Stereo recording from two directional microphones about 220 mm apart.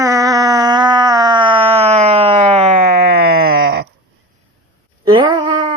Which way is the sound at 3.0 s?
45° right (ahead or behind).